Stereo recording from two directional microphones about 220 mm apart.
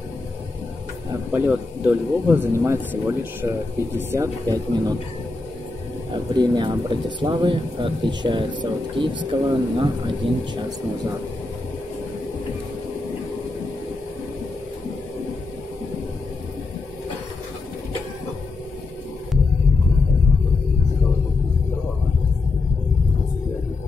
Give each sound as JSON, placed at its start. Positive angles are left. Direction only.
{"t": 1.3, "sound": "speech", "side_deg": -10}
{"t": 6.1, "sound": "speech", "side_deg": -20}